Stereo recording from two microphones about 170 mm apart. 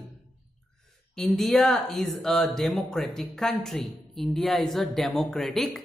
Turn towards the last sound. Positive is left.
turn(degrees=0)  # may be behind; listen again after turning